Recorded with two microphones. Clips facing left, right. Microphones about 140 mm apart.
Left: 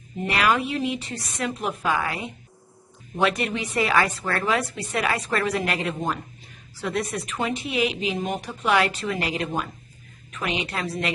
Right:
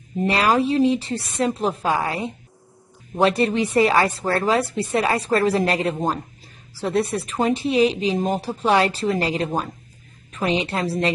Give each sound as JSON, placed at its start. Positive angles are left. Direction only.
{"t": 0.2, "sound": "a woman's voice", "side_deg": -35}